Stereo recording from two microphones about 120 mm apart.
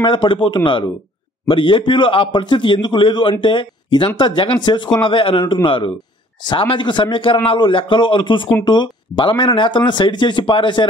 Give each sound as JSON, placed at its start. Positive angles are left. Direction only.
{"t": 0.0, "sound": "a man's voice", "side_deg": 45}